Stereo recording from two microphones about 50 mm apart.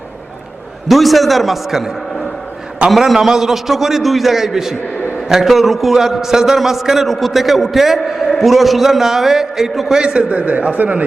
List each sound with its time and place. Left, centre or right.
0.9 s a man's voice: centre
10.0 s a man's voice: right